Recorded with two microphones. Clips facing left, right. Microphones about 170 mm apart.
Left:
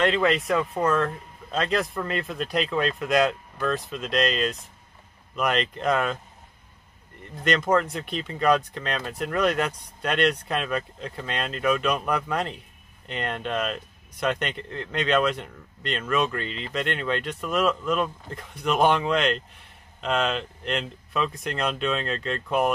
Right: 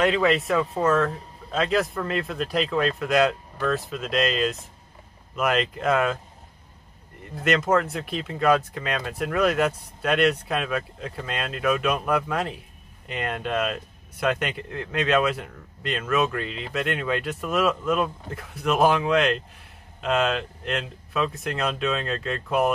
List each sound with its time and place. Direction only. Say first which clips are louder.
0.0 s speech: right 1 dB; 5° right (ahead or behind)
7.4 s speech: right 1 dB; 5° right (ahead or behind)